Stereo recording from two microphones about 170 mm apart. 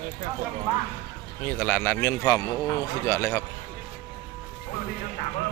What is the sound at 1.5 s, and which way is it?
A man's voice, 10° left (ahead or behind).